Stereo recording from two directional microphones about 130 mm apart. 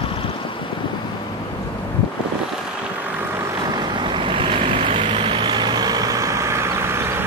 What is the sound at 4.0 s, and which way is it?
Vehicle, 40° right (ahead or behind).